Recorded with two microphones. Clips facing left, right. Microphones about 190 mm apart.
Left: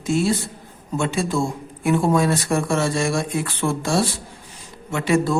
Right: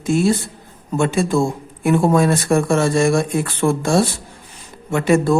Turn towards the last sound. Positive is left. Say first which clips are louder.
# right 4 dB
turn(degrees=-50)  # may be behind; listen again after turning